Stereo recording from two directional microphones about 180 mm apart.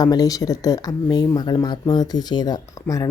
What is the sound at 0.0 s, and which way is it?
Speech, 20° left (ahead or behind).